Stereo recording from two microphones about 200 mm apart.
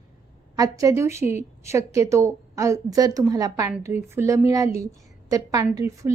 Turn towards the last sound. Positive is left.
turn(degrees=-15)  # may be behind; listen again after turning